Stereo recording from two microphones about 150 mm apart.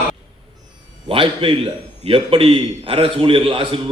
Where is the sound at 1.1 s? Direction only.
35° right (ahead or behind).